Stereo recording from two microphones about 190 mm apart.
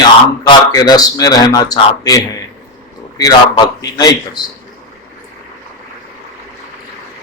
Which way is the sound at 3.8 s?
20° left (ahead or behind).